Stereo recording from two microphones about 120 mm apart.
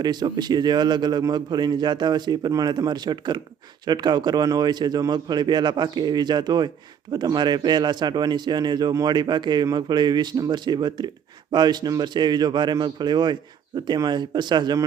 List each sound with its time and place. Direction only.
0.0 s a man's voice: 35° right (ahead or behind)